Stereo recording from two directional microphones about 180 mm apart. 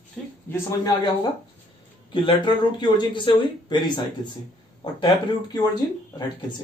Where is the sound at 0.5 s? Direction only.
20° left (ahead or behind).